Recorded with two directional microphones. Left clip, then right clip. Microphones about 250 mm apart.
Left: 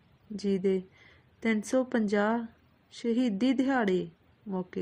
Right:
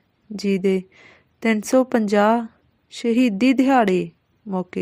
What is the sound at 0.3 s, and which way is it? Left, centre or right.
A woman's voice, right.